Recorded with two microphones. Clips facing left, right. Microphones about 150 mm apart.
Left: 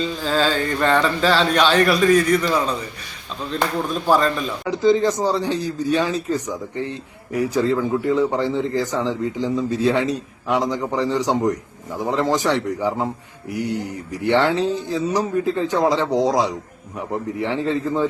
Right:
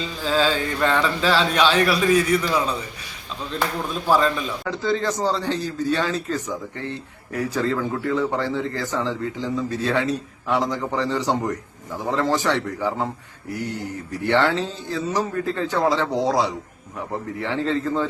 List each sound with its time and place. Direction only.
0.3 s speech: 5° right (ahead or behind)
4.1 s speech: 5° right (ahead or behind)
4.6 s a man's voice: 15° left (ahead or behind)